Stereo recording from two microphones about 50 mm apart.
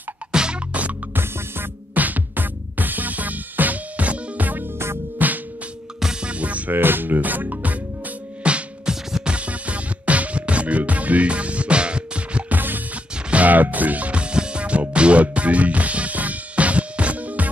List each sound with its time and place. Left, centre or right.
0.3 s music: centre
1.1 s music: right
2.0 s music: right
6.7 s speech: right
8.5 s music: right
12.4 s music: right
13.1 s music: right